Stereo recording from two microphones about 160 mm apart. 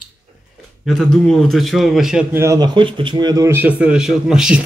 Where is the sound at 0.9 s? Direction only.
Centre (ahead or behind).